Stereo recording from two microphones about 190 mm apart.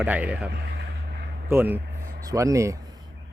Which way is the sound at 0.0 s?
5° right (ahead or behind).